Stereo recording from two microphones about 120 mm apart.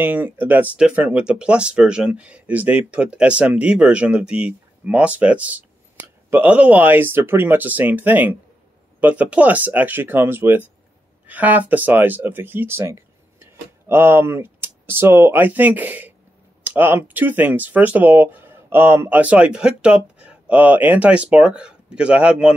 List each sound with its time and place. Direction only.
0.0 s speech: 15° right (ahead or behind)